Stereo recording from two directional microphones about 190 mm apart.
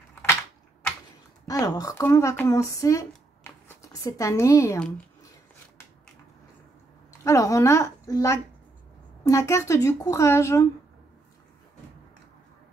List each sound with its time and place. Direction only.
1.5 s speech: 20° left (ahead or behind)
3.1 s a sound: 10° left (ahead or behind)
4.7 s speech: 5° left (ahead or behind)
7.1 s speech: 15° left (ahead or behind)